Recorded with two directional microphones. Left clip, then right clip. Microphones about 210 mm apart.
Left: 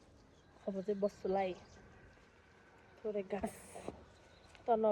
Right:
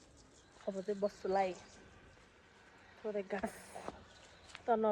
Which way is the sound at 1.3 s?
Centre (ahead or behind).